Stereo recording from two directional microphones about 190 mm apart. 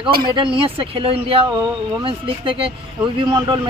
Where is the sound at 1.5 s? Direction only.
20° right (ahead or behind).